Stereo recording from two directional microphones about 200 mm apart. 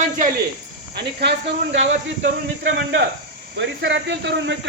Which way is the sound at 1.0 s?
55° right (ahead or behind).